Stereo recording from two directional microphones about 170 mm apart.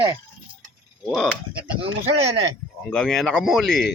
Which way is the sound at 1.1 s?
5° left (ahead or behind).